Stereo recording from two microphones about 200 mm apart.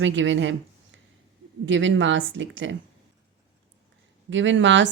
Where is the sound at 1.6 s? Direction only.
65° right (ahead or behind).